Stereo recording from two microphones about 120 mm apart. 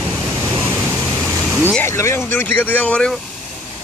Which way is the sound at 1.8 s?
25° left (ahead or behind).